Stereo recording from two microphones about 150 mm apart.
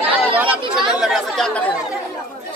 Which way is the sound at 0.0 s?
10° right (ahead or behind).